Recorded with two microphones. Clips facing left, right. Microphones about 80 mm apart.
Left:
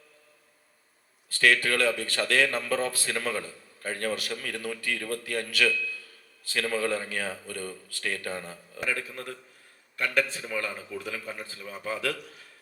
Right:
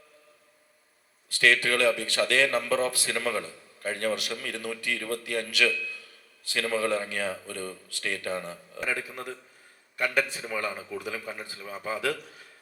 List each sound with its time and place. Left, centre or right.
1.4 s a man's voice: right
7.4 s a man's voice: right; by 12.2 s centre